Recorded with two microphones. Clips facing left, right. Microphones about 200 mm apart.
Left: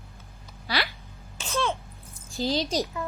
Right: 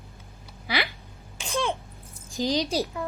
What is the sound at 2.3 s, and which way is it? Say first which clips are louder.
Speech: right 1 dB; 15° right (ahead or behind).